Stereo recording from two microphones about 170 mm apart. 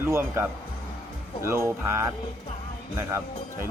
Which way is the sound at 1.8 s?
15° right (ahead or behind).